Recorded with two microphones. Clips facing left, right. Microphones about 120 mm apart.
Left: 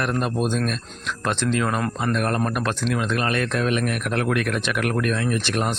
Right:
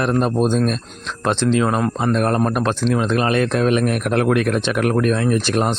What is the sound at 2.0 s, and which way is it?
Speech, 35° right (ahead or behind).